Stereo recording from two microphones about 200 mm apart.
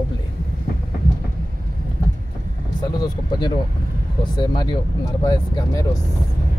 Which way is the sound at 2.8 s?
20° left (ahead or behind).